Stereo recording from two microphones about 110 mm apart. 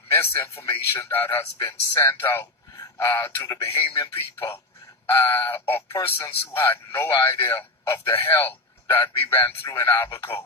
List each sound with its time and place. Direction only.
0.1 s a man's voice: 20° left (ahead or behind)